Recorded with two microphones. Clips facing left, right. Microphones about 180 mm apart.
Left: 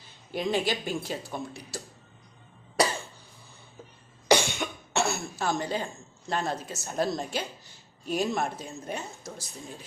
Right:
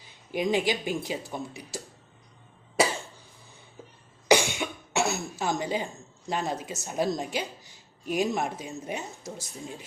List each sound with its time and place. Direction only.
0.0 s speech: 15° right (ahead or behind)
4.3 s cough: 10° right (ahead or behind)
5.0 s speech: 20° right (ahead or behind)